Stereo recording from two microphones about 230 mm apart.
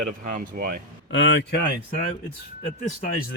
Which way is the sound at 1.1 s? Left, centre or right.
Left.